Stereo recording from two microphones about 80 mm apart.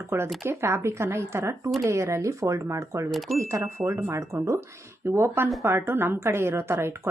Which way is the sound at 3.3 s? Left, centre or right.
Right.